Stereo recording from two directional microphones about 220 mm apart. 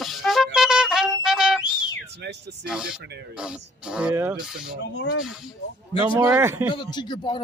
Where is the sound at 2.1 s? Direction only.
50° right (ahead or behind).